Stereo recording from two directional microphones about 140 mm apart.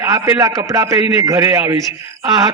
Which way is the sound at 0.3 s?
25° right (ahead or behind).